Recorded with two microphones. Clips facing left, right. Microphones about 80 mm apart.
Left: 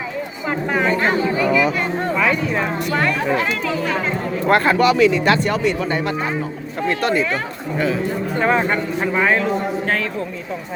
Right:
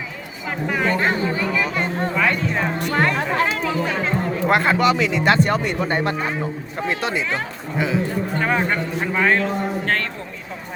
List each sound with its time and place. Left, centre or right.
0.7 s a sound: centre
2.1 s a sound: centre
2.9 s speech: right
4.4 s a man's voice: centre
5.2 s speech: right
6.7 s a man's voice: centre
8.4 s a man's voice: centre